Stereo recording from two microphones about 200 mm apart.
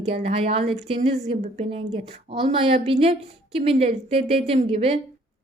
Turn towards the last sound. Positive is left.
turn(degrees=-30)  # may be behind; listen again after turning